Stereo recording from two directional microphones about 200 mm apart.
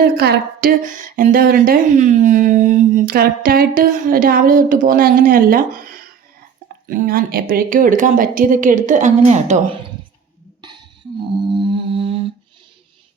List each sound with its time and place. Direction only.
0.0 s a woman's voice: 50° right (ahead or behind); by 9.9 s 30° right (ahead or behind)
11.5 s music: 25° right (ahead or behind)